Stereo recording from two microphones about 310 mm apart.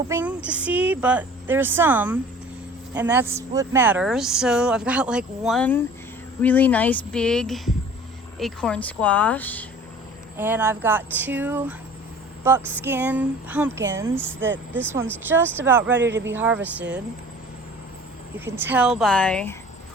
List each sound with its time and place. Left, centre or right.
0.1 s speech: centre
10.3 s speech: centre
15.9 s speech: right
16.3 s speech: centre
18.3 s speech: centre